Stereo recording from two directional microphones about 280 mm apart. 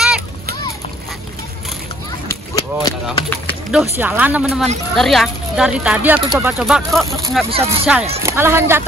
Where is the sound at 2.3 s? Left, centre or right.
Centre.